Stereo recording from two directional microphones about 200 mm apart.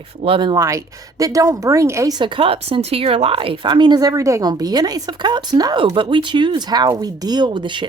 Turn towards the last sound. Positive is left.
turn(degrees=-25)  # may be behind; listen again after turning